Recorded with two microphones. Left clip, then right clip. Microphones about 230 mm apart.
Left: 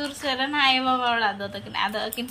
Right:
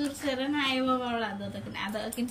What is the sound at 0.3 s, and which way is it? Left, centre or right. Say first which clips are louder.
A woman's voice: left 9 dB; centre.